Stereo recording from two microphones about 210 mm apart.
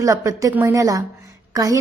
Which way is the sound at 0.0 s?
15° right (ahead or behind).